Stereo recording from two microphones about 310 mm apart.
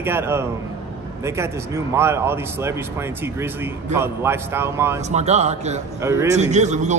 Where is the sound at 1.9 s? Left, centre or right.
Centre.